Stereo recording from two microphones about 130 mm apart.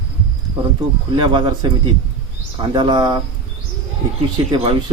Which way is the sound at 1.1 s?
40° right (ahead or behind).